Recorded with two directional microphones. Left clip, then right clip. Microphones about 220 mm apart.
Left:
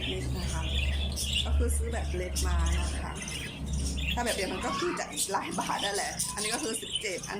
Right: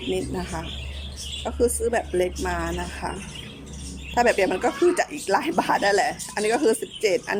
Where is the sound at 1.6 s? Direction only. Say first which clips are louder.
Right 14 dB; 35° right (ahead or behind).